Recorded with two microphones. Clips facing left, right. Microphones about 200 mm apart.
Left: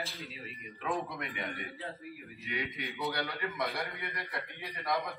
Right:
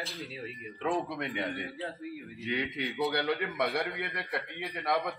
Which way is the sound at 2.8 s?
25° right (ahead or behind).